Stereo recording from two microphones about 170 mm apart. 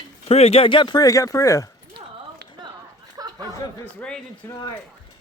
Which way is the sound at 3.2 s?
20° right (ahead or behind).